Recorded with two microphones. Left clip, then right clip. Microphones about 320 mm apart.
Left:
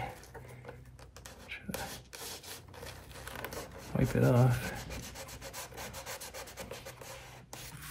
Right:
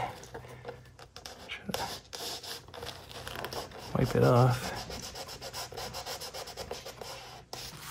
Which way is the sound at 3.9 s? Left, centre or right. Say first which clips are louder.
Right 4 dB; centre.